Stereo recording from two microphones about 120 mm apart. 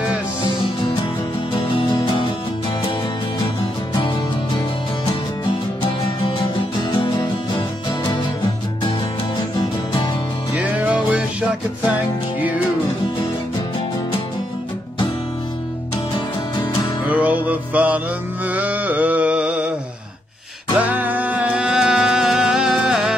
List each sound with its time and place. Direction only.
1.5 s music: 40° left (ahead or behind)
7.0 s music: 45° left (ahead or behind)
10.5 s music: 15° right (ahead or behind)
12.4 s music: 15° right (ahead or behind)
17.1 s music: 15° right (ahead or behind)
18.5 s a sound: 15° right (ahead or behind)
20.8 s music: 15° right (ahead or behind)